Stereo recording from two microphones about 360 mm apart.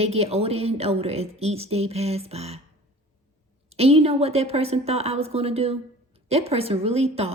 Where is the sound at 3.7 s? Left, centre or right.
Centre.